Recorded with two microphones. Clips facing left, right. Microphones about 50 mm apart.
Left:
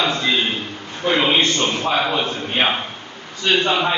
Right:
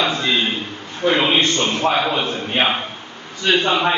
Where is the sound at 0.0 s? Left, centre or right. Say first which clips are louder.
Even; centre.